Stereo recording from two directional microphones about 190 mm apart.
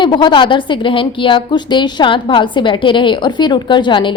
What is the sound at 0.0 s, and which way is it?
A woman's voice, 25° left (ahead or behind).